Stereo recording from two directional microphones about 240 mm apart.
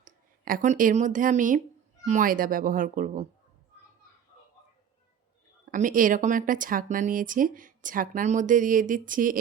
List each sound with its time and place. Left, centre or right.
0.0 s speech: right
5.7 s speech: right